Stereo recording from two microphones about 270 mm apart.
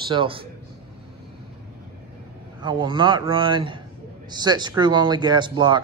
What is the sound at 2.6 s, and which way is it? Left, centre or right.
Speech, centre.